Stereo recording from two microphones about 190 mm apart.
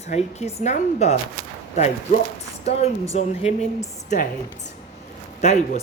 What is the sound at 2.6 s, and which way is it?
A woman's voice, 35° left (ahead or behind).